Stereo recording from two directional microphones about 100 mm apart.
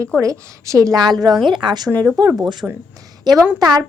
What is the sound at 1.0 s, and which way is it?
Speech, 45° right (ahead or behind).